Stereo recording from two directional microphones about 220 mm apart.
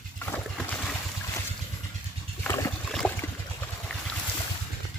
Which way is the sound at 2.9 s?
5° left (ahead or behind).